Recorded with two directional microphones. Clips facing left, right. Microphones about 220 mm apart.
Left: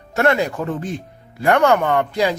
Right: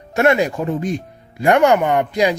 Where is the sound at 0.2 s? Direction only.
15° right (ahead or behind).